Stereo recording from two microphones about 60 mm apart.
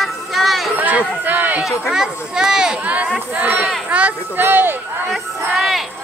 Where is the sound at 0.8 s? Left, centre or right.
Right.